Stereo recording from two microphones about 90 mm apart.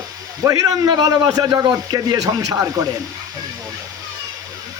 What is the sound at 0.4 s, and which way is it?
Speech, 40° right (ahead or behind).